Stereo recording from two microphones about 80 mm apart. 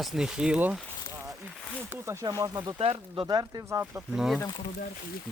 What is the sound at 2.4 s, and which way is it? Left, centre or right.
Speech, right.